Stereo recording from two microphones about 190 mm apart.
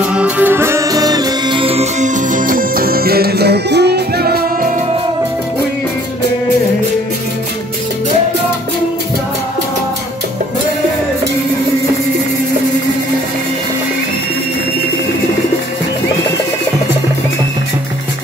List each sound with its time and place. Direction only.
0.1 s music: 10° right (ahead or behind); by 4.6 s 55° right (ahead or behind)